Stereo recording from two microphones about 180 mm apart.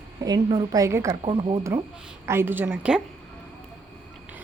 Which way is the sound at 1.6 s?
15° right (ahead or behind).